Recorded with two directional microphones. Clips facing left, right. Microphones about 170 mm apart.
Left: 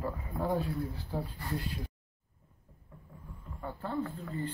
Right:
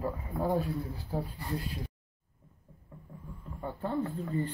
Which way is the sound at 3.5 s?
20° right (ahead or behind).